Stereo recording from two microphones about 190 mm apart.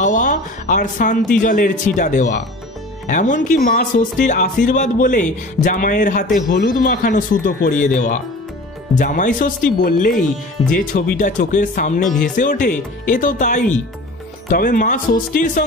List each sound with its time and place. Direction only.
0.0 s speech: 45° left (ahead or behind)